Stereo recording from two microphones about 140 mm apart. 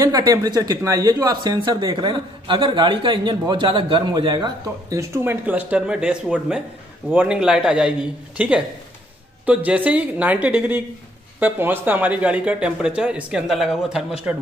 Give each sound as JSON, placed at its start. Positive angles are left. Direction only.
{"t": 0.0, "sound": "speech", "side_deg": -25}